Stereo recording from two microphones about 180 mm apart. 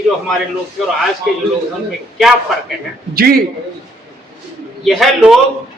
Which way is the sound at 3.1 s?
55° right (ahead or behind).